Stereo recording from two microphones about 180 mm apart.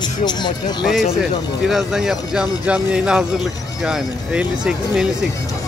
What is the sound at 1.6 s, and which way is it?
Speech, centre (ahead or behind).